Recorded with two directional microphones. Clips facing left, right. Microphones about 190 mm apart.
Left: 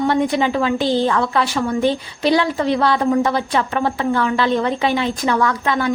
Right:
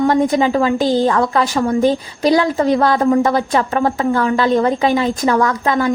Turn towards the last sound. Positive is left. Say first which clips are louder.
# right 3 dB
turn(degrees=-40)  # may be behind; listen again after turning